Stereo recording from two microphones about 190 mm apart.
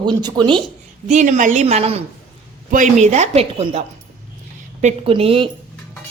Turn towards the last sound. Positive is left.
turn(degrees=-30)  # may be behind; listen again after turning